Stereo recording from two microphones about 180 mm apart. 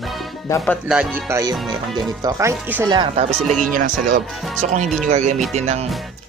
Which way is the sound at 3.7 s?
45° right (ahead or behind).